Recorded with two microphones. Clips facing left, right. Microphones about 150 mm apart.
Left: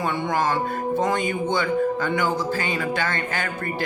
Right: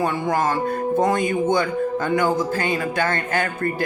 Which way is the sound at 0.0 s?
40° right (ahead or behind).